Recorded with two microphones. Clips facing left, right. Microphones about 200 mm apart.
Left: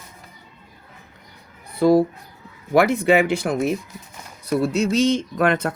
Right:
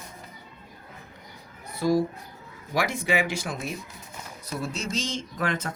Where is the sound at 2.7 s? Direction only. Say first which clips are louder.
Left 10 dB; 60° left (ahead or behind).